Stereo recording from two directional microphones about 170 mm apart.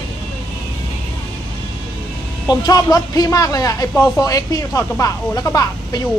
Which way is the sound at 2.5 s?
20° left (ahead or behind).